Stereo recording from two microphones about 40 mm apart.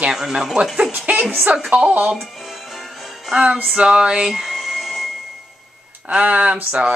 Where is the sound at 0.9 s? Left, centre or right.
Right.